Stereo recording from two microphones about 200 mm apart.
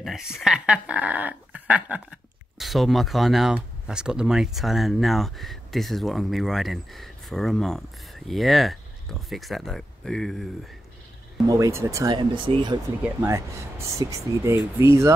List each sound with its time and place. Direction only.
0.0 s speech: centre (ahead or behind)
11.4 s speech: 15° right (ahead or behind)
13.0 s speech: 10° right (ahead or behind)